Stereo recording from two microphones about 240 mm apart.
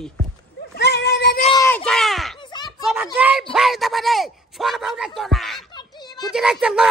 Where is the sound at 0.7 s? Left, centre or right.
Left.